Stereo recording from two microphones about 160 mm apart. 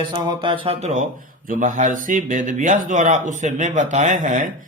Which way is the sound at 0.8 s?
50° right (ahead or behind).